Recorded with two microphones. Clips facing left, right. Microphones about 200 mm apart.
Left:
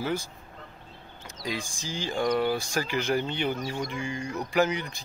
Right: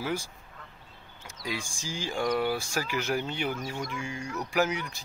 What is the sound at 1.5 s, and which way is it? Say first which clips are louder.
Speech: left 2 dB; 10° right (ahead or behind).